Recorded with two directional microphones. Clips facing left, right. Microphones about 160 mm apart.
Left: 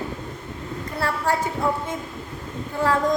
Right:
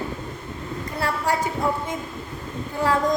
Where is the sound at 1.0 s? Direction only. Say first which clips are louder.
Even; 15° right (ahead or behind).